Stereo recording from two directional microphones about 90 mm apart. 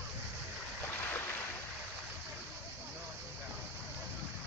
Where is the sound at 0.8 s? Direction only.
25° left (ahead or behind).